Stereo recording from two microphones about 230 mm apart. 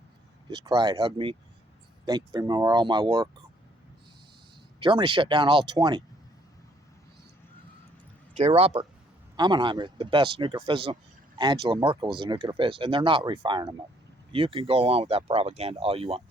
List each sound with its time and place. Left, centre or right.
0.5 s speech: centre
4.8 s speech: right
8.3 s speech: right